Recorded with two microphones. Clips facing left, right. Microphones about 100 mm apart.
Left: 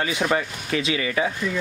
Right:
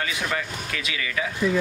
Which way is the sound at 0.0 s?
30° left (ahead or behind).